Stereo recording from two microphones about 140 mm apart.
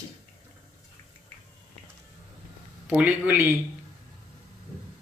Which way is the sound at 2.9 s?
10° right (ahead or behind).